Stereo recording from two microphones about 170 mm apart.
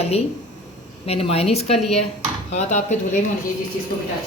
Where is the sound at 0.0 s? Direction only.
35° left (ahead or behind).